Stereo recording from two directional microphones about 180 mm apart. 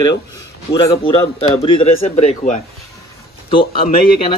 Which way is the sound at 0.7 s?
30° left (ahead or behind).